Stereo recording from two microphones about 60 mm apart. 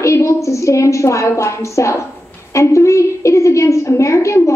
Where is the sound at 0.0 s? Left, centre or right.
Left.